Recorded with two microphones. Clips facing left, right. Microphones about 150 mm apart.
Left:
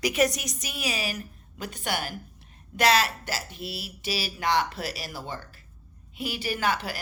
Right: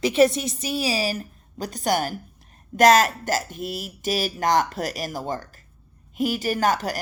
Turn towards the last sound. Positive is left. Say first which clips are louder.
# right 5 dB
turn(degrees=-45)  # may be behind; listen again after turning